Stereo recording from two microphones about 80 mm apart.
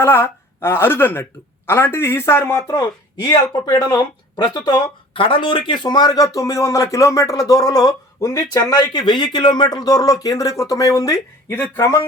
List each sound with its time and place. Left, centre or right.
0.0 s speech: left
3.7 s speech: left
8.7 s speech: left